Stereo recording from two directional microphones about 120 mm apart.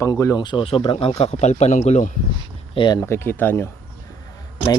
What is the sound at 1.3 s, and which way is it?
Speech, 70° left (ahead or behind).